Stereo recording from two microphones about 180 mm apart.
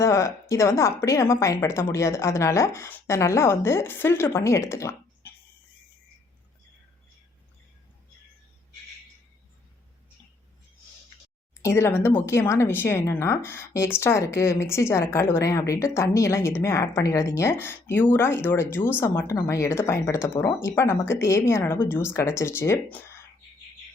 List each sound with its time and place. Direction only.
0.0 s a woman's voice: 15° left (ahead or behind)
11.6 s a woman's voice: 15° left (ahead or behind)